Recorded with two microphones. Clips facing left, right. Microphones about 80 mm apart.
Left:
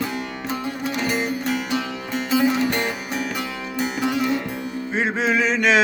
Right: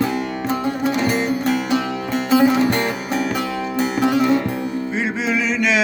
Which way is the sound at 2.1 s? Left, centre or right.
Right.